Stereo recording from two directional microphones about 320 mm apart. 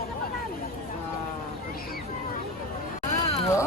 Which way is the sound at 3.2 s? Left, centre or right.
Centre.